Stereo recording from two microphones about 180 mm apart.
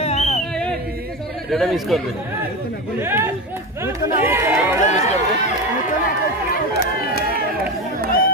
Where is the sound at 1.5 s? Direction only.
Centre (ahead or behind).